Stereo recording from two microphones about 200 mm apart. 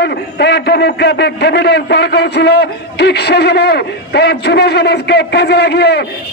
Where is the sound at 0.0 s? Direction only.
55° left (ahead or behind).